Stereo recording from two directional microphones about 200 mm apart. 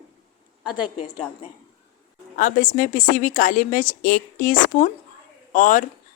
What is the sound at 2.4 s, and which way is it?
A woman's voice, 40° left (ahead or behind).